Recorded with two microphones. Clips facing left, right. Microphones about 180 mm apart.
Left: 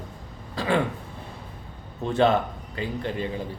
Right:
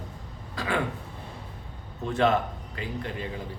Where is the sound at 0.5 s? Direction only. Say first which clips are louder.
Left 5 dB; 30° left (ahead or behind).